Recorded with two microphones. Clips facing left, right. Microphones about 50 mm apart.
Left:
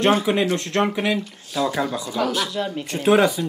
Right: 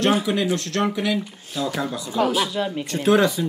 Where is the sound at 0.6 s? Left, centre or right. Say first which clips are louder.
Left 2 dB; centre.